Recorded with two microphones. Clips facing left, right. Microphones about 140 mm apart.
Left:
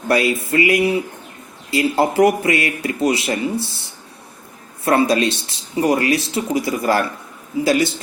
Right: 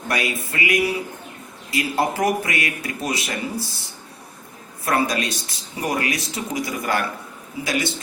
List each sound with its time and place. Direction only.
0.1 s a man's voice: 30° left (ahead or behind)
4.9 s a man's voice: 30° left (ahead or behind)